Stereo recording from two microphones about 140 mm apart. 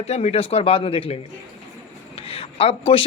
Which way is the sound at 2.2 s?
40° left (ahead or behind).